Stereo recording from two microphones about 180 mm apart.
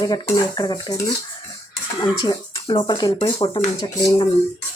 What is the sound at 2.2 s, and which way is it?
Speech, 25° left (ahead or behind).